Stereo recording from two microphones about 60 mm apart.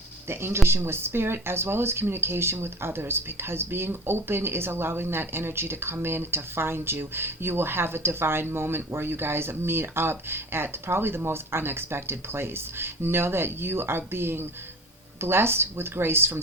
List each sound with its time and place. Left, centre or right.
0.3 s speech: right